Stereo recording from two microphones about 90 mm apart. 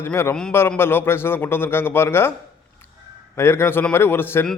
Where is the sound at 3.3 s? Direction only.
30° left (ahead or behind).